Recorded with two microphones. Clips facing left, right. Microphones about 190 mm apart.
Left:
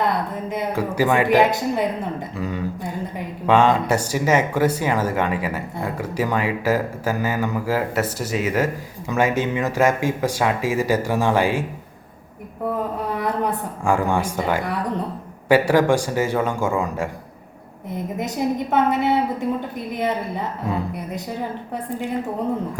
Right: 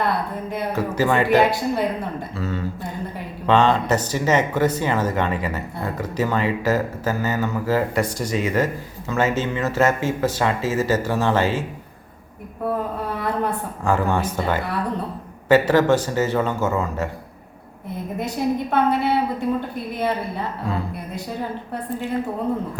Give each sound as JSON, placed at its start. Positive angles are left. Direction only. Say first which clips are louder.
{"t": 0.5, "sound": "speech", "louder": "left 1 dB", "side_deg": 15}
{"t": 13.1, "sound": "a sound", "louder": "left 1 dB", "side_deg": 15}
{"t": 15.4, "sound": "speech", "louder": "even", "side_deg": 10}
{"t": 17.8, "sound": "a woman's voice", "louder": "left 1 dB", "side_deg": 20}